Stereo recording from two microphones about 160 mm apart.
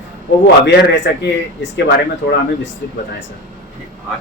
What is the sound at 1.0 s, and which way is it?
Speech, 90° left.